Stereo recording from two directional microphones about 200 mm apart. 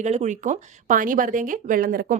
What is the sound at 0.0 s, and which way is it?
A woman's voice, 35° right (ahead or behind).